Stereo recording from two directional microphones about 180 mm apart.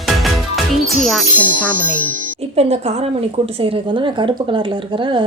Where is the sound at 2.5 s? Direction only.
35° right (ahead or behind).